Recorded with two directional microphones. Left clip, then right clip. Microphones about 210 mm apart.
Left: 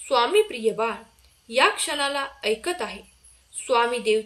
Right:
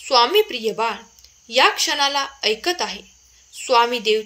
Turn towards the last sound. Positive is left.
turn(degrees=-35)  # may be behind; listen again after turning